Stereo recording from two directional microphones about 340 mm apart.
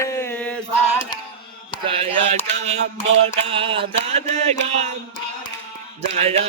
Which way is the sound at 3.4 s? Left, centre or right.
Centre.